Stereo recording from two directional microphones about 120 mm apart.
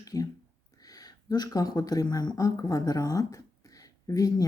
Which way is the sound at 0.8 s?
30° left (ahead or behind).